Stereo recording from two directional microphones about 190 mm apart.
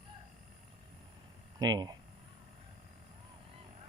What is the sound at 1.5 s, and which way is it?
Speech, 20° right (ahead or behind).